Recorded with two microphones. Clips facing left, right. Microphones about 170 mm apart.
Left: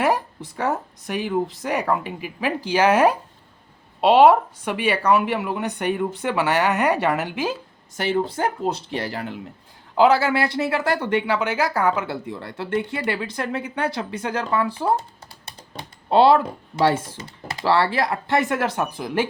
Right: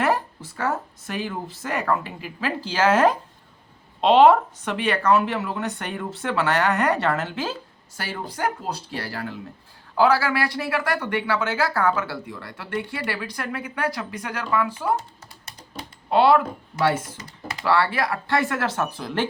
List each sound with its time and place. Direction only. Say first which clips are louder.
0.0 s speech: left 2 dB; 15° left (ahead or behind)
7.9 s speech: left 9 dB; 25° left (ahead or behind)
16.0 s speech: left 2 dB; 30° left (ahead or behind); by 19.3 s 15° left (ahead or behind)